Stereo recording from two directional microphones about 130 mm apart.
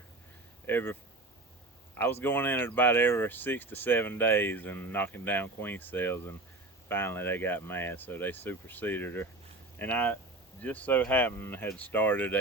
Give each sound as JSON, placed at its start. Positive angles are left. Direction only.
{"t": 0.7, "sound": "speech", "side_deg": 15}
{"t": 2.2, "sound": "speech", "side_deg": 15}